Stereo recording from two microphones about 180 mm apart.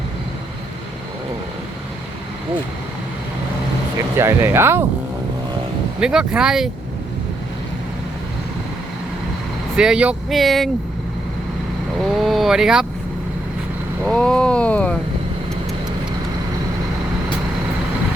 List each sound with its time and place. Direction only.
4.2 s speech: 15° right (ahead or behind)
6.0 s speech: 5° right (ahead or behind)
9.7 s speech: 5° right (ahead or behind)
12.1 s speech: centre (ahead or behind)
14.0 s speech: 5° left (ahead or behind)